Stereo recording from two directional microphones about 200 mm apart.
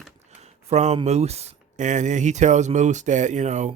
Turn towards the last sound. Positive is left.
turn(degrees=-35)  # may be behind; listen again after turning